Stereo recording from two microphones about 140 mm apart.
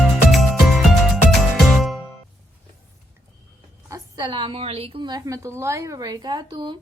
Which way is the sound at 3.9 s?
30° right (ahead or behind).